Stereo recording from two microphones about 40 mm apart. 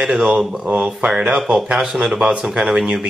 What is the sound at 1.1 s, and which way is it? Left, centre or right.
Speech, centre.